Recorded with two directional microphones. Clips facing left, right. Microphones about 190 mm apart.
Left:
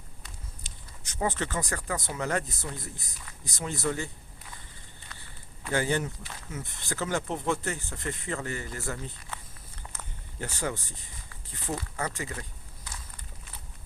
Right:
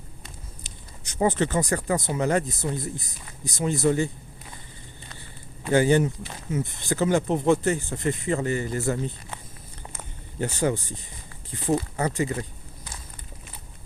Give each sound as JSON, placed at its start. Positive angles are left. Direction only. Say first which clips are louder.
{"t": 1.0, "sound": "speech", "louder": "right 7 dB", "side_deg": -20}
{"t": 5.6, "sound": "speech", "louder": "right 9 dB", "side_deg": -20}
{"t": 9.9, "sound": "a sound", "louder": "right 5 dB", "side_deg": -20}